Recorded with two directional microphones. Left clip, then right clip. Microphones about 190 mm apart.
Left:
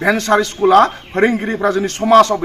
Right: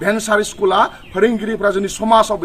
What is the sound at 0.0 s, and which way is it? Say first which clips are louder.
A man's voice: left 2 dB; 30° right (ahead or behind).